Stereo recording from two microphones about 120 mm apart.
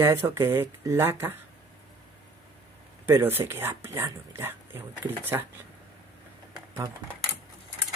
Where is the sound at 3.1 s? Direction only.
20° right (ahead or behind).